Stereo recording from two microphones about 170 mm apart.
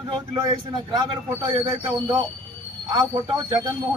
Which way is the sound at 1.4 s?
30° right (ahead or behind).